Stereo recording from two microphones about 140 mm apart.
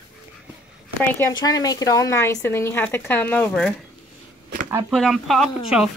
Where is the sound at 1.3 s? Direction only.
30° left (ahead or behind); by 3.7 s 10° left (ahead or behind).